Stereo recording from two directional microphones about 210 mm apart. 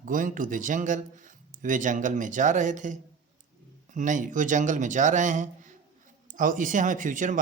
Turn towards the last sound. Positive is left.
turn(degrees=-40)  # may be behind; listen again after turning